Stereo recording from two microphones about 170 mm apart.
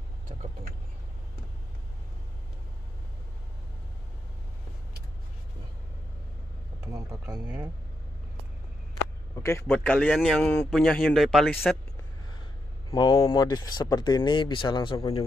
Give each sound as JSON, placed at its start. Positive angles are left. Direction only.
{"t": 0.3, "sound": "speech", "side_deg": -40}
{"t": 6.9, "sound": "speech", "side_deg": -20}
{"t": 9.3, "sound": "a man's voice", "side_deg": 15}
{"t": 12.9, "sound": "speech", "side_deg": 25}